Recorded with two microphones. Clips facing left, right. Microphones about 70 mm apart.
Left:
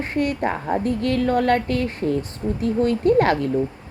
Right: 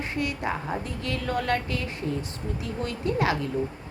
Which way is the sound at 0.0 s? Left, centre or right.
Left.